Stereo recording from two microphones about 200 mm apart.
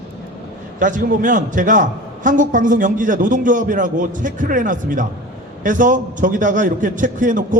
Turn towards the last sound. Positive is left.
turn(degrees=-40)  # may be behind; listen again after turning